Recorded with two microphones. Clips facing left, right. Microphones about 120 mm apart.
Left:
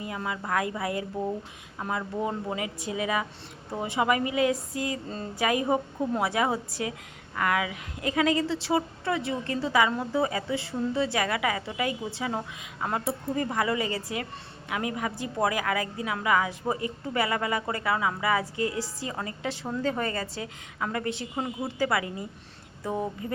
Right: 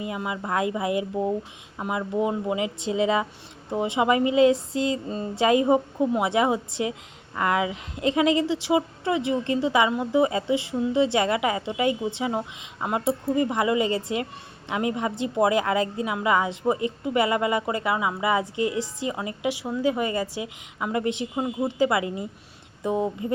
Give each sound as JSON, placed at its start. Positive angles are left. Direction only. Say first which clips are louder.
{"t": 0.0, "sound": "a woman's voice", "louder": "right 3 dB", "side_deg": -20}